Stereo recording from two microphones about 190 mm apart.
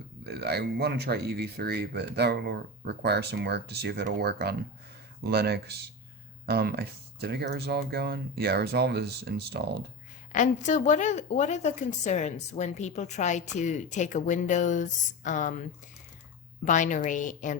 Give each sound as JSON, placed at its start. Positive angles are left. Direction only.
{"t": 0.3, "sound": "speech", "side_deg": -60}
{"t": 10.3, "sound": "a woman's voice", "side_deg": 40}
{"t": 16.6, "sound": "a woman's voice", "side_deg": 40}